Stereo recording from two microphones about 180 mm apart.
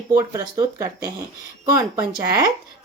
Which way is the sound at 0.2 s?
20° right (ahead or behind).